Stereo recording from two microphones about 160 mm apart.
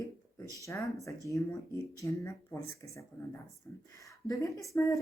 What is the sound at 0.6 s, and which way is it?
Speech, 20° left (ahead or behind).